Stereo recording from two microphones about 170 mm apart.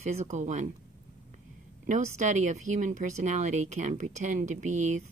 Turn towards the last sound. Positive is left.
turn(degrees=-45)  # may be behind; listen again after turning